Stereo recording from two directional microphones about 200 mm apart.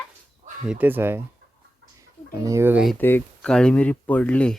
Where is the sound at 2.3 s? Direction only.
15° right (ahead or behind).